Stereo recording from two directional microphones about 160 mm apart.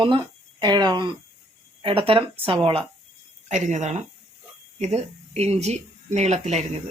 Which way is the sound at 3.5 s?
50° right (ahead or behind).